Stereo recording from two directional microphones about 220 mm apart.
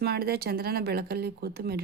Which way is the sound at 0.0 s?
45° right (ahead or behind).